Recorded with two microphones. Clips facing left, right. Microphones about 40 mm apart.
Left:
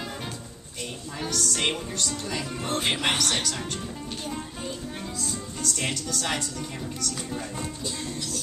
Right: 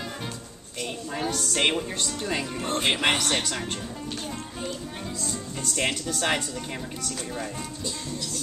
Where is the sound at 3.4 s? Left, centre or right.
Right.